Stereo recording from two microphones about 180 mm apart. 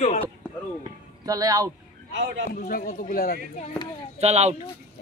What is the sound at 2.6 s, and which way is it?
Speech, 50° left (ahead or behind).